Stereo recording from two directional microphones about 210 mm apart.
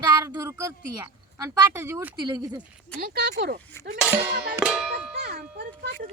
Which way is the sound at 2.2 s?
20° right (ahead or behind).